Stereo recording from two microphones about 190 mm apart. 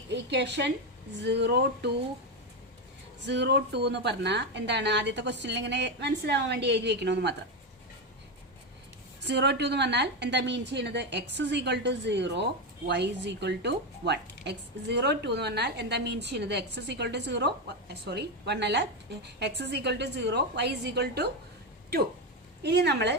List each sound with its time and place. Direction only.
0.1 s a woman's voice: 65° right (ahead or behind)
3.2 s a woman's voice: 65° right (ahead or behind)
9.2 s a woman's voice: 65° right (ahead or behind)
22.6 s a woman's voice: 60° right (ahead or behind)